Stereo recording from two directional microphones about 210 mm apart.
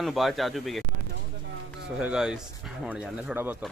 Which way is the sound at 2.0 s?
5° right (ahead or behind).